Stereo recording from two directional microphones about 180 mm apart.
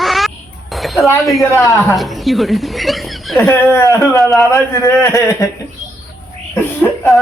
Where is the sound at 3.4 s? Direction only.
15° left (ahead or behind).